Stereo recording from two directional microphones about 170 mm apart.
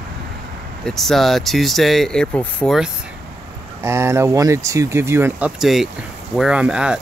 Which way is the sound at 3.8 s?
15° right (ahead or behind).